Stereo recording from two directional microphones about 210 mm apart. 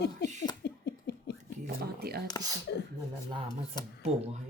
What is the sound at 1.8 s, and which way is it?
Speech, 50° right (ahead or behind).